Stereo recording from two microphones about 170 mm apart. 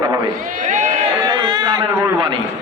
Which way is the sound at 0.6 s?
45° right (ahead or behind).